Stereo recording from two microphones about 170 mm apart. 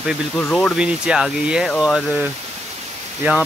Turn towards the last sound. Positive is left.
turn(degrees=-10)  # may be behind; listen again after turning